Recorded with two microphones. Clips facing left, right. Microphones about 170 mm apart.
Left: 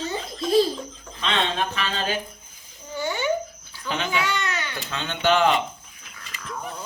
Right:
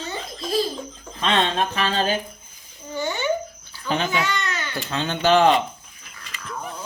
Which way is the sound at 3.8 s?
40° right (ahead or behind).